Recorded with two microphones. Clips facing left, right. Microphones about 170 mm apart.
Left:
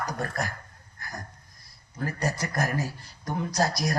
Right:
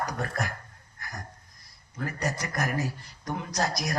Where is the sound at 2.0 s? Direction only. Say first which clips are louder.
Left 2 dB; 30° left (ahead or behind).